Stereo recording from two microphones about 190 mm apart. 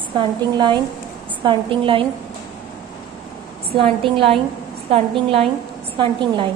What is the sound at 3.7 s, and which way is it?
A woman's voice, 30° right (ahead or behind).